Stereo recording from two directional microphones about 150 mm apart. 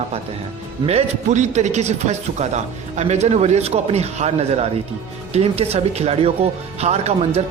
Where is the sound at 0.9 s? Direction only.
45° right (ahead or behind).